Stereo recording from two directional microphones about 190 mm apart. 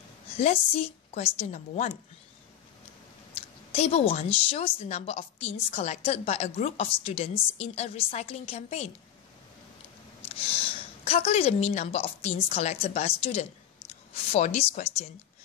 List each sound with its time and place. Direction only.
0.4 s a woman's voice: 35° left (ahead or behind)
3.7 s a woman's voice: 35° left (ahead or behind)
10.2 s a woman's voice: 30° left (ahead or behind)